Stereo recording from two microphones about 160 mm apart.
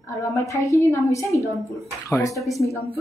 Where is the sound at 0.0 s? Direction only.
20° left (ahead or behind).